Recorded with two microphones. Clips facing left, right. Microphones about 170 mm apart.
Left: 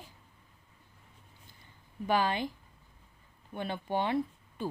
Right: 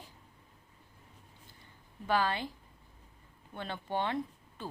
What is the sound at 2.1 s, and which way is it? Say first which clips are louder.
Speech: left 2 dB; 15° left (ahead or behind).